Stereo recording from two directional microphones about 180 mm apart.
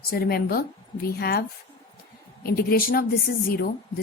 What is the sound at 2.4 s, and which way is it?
A woman's voice, 55° left (ahead or behind).